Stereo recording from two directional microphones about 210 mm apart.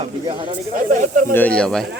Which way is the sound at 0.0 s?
25° right (ahead or behind).